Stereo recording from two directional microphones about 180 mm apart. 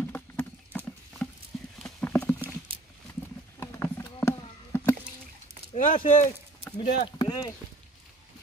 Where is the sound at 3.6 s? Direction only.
15° left (ahead or behind).